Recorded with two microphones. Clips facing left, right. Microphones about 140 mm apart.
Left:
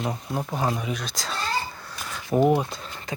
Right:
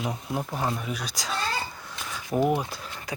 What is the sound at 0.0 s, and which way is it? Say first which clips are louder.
Speech: left 1 dB; centre (ahead or behind).